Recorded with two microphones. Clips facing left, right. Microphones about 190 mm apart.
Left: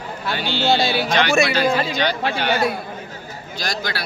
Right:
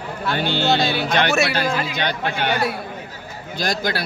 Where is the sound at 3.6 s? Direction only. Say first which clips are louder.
Right 4 dB; 50° right (ahead or behind).